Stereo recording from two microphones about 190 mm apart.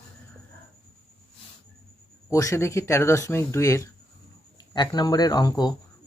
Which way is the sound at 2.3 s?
15° left (ahead or behind).